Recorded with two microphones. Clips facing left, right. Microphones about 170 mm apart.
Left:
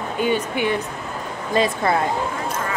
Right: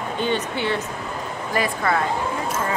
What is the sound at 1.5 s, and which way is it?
Speech, 25° left (ahead or behind).